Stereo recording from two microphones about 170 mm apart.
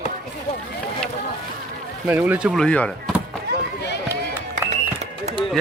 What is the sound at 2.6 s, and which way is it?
Speech, 5° left (ahead or behind).